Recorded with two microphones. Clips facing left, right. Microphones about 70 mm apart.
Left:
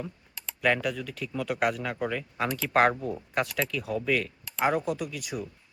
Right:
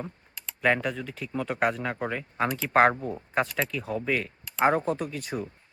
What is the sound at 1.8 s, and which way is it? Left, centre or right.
Speech, right.